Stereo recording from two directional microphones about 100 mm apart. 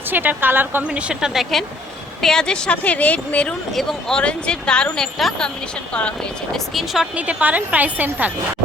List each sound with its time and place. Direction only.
0.1 s a woman's voice: 20° right (ahead or behind); by 6.6 s 10° left (ahead or behind)
6.7 s speech: 5° right (ahead or behind)
7.2 s a woman's voice: 15° right (ahead or behind)